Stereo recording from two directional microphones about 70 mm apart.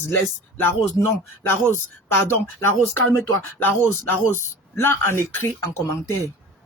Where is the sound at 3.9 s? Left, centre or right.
Left.